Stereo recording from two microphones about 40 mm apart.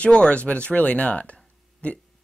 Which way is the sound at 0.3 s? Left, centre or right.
Left.